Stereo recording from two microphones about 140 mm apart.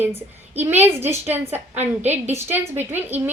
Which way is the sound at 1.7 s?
55° right (ahead or behind).